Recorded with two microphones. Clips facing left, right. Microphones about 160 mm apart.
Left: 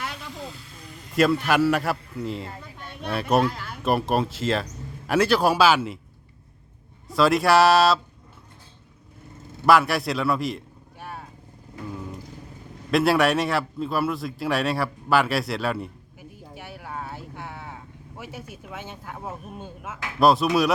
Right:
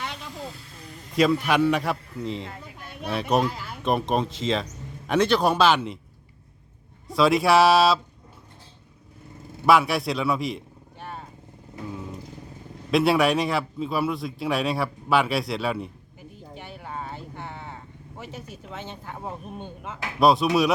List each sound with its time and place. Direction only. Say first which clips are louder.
1.1 s a man's voice: even; centre (ahead or behind)
7.1 s a man's voice: even; centre (ahead or behind)
9.6 s a sound: left 1 dB; centre (ahead or behind)
12.9 s a man's voice: even; centre (ahead or behind)
16.6 s vehicle: even; 5° left (ahead or behind)
19.1 s a man's voice: right 1 dB; centre (ahead or behind)